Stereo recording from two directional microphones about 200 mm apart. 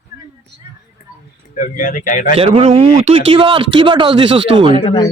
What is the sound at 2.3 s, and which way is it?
Speech, 30° right (ahead or behind).